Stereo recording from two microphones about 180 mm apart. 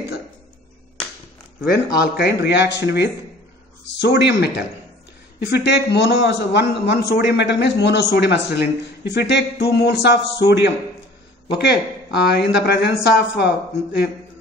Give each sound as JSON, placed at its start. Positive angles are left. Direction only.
{"t": 1.7, "sound": "a man's voice", "side_deg": 65}